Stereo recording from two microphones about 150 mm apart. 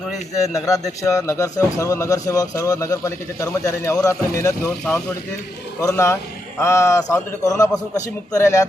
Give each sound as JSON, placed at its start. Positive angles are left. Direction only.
{"t": 0.6, "sound": "speech", "side_deg": 20}